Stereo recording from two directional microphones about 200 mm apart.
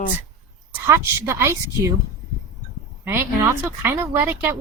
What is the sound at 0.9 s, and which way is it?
Speech, 10° right (ahead or behind).